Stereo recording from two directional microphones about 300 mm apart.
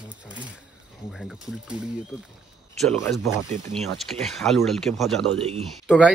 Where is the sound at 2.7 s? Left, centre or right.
Centre.